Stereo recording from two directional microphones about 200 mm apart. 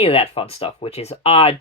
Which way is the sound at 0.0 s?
30° left (ahead or behind).